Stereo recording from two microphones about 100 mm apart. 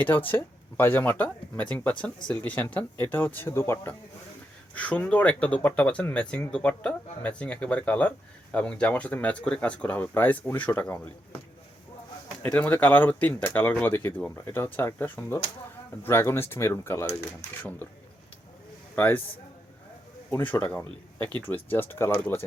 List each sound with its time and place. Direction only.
0.0 s speech: 20° left (ahead or behind)
4.7 s speech: 15° left (ahead or behind)
12.4 s speech: 15° left (ahead or behind)
18.9 s speech: 20° left (ahead or behind)
20.3 s speech: 20° left (ahead or behind)